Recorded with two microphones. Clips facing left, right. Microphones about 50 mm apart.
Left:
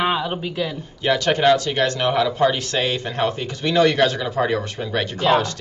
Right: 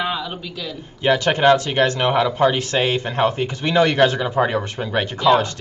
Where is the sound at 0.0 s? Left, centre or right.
Left.